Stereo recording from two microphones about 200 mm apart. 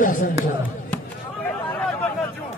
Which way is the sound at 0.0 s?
45° left (ahead or behind).